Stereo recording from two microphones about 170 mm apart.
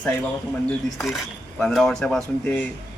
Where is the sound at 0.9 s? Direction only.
Centre (ahead or behind).